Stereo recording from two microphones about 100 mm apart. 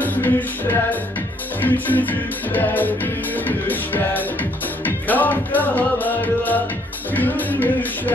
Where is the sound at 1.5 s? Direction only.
20° left (ahead or behind).